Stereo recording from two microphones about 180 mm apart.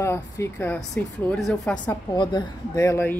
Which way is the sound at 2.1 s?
25° left (ahead or behind).